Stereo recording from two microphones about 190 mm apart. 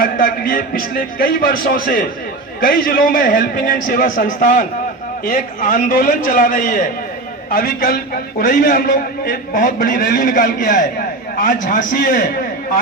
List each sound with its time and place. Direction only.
0.0 s a man's voice: 50° left (ahead or behind)